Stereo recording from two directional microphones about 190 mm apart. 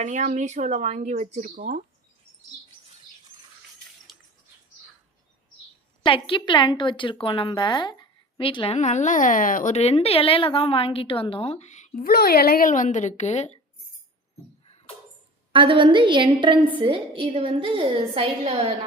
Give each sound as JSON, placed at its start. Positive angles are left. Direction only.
{"t": 0.0, "sound": "speech", "side_deg": -40}
{"t": 4.1, "sound": "a sound", "side_deg": 0}
{"t": 6.1, "sound": "a woman's voice", "side_deg": 25}
{"t": 15.5, "sound": "a woman's voice", "side_deg": -25}